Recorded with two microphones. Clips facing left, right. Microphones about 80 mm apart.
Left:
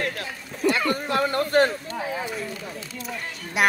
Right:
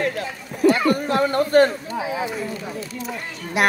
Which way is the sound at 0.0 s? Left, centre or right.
Centre.